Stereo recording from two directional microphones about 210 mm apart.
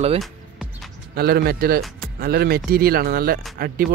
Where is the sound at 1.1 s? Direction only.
50° right (ahead or behind).